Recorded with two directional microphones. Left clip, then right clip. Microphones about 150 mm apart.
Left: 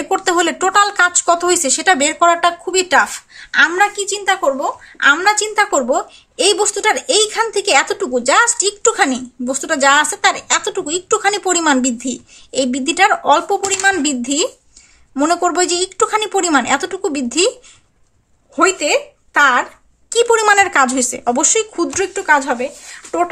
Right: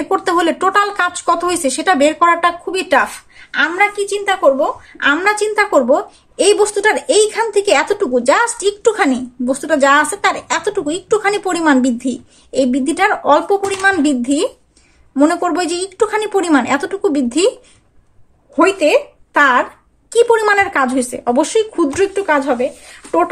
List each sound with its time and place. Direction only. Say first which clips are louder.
0.1 s speech: right 1 dB; 20° left (ahead or behind)
4.0 s a woman's voice: right 3 dB; 15° left (ahead or behind)
18.6 s speech: right 2 dB; 10° left (ahead or behind)
20.1 s speech: right 1 dB; 15° left (ahead or behind)